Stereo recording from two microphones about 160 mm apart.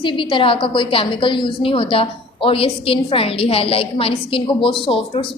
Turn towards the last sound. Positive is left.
turn(degrees=35)  # may be behind; listen again after turning